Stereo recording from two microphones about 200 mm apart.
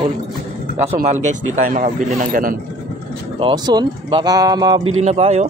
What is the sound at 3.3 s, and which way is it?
Speech, 25° right (ahead or behind).